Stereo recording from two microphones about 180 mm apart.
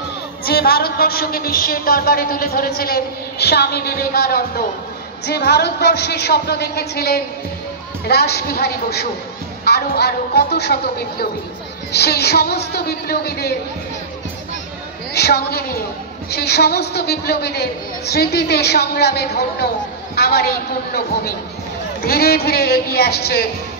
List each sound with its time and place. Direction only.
0.5 s a woman's voice: 60° left (ahead or behind)
15.1 s a woman's voice: 65° left (ahead or behind)